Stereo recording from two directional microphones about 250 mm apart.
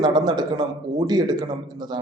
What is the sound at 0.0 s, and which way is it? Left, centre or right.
A man's voice, centre.